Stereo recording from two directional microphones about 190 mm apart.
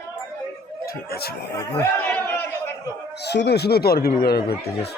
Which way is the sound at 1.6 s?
10° left (ahead or behind).